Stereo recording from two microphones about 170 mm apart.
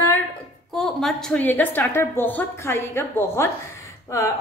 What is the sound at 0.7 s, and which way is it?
A woman's voice, centre (ahead or behind).